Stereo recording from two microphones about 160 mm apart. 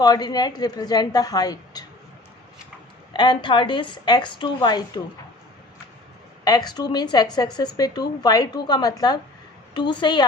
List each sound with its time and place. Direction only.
0.0 s speech: 25° left (ahead or behind)
3.1 s speech: 30° left (ahead or behind)
6.4 s speech: 25° left (ahead or behind)